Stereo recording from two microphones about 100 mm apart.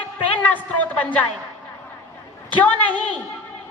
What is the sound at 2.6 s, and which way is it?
Speech, 15° left (ahead or behind).